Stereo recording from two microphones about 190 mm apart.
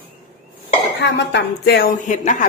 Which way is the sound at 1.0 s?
65° left (ahead or behind).